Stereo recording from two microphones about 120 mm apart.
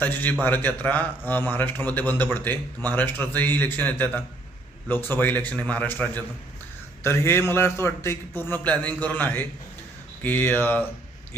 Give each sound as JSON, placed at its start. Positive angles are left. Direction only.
{"t": 0.0, "sound": "a man's voice", "side_deg": 15}